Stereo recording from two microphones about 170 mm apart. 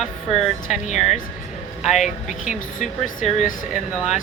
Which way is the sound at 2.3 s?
45° left (ahead or behind).